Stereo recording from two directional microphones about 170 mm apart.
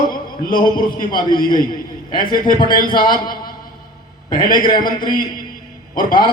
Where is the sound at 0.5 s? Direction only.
25° left (ahead or behind).